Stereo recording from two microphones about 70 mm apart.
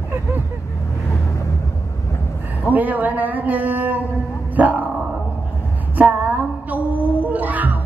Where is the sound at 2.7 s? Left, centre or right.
Right.